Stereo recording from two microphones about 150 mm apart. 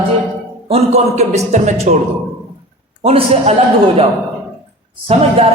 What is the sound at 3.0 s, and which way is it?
Speech, 40° right (ahead or behind).